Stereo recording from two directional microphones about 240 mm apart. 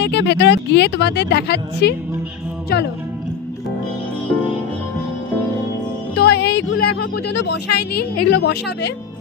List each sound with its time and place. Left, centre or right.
0.0 s speech: left
6.1 s music: left
7.3 s speech: left
7.9 s a woman's voice: left
8.4 s speech: left